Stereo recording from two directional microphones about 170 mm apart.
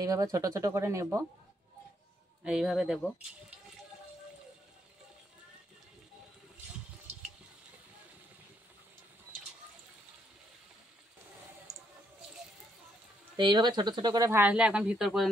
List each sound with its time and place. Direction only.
0.0 s speech: 20° right (ahead or behind)
2.4 s speech: 5° right (ahead or behind)
13.4 s speech: 25° right (ahead or behind); by 15.2 s centre (ahead or behind)